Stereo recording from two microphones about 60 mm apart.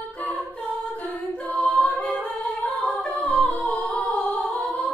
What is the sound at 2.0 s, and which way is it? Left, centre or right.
A capella, centre.